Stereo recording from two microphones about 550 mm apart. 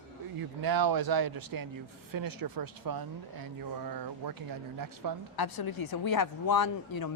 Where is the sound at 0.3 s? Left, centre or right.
Right.